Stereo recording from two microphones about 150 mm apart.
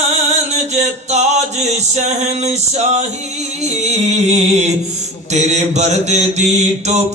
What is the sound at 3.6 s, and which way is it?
Mantra, 50° right (ahead or behind).